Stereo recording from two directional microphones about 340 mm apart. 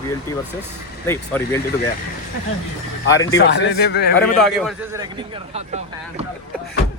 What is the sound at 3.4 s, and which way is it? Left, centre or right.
Speech, left.